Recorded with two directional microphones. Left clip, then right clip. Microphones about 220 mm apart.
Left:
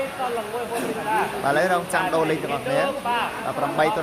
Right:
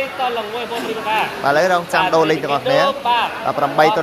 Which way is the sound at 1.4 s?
10° right (ahead or behind).